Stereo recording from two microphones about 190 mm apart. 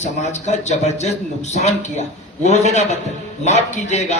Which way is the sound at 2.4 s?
35° left (ahead or behind).